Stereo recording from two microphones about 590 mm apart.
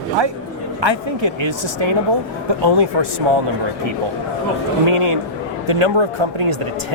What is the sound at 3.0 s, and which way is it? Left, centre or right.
Speech, right.